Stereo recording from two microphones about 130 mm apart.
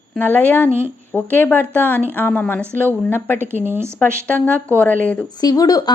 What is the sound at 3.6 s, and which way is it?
Speech, 15° right (ahead or behind).